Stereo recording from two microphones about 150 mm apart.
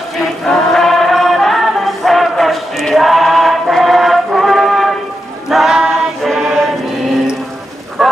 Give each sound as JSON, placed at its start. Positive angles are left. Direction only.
{"t": 0.1, "sound": "chant", "side_deg": 0}
{"t": 5.5, "sound": "choir", "side_deg": 0}
{"t": 8.0, "sound": "a sound", "side_deg": 0}